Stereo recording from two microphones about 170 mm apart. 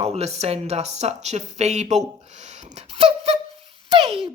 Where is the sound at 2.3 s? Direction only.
45° right (ahead or behind).